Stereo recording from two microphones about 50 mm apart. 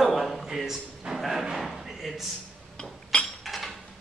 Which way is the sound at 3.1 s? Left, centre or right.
Left.